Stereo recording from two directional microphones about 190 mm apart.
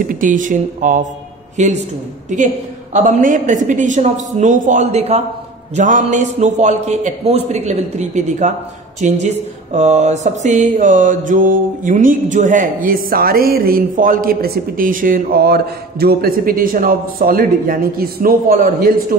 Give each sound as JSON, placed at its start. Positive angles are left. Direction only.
{"t": 0.0, "sound": "mantra", "side_deg": -45}
{"t": 1.6, "sound": "a woman's voice", "side_deg": -40}
{"t": 9.0, "sound": "mantra", "side_deg": -40}